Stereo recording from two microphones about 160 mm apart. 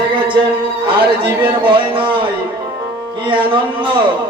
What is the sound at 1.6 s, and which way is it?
Speech, 35° right (ahead or behind).